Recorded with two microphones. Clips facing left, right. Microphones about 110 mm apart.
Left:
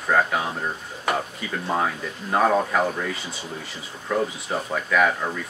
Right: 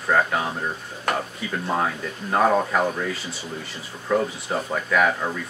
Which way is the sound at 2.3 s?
Centre (ahead or behind).